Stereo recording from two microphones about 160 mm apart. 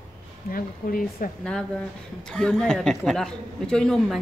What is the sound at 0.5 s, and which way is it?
Speech, 65° left (ahead or behind).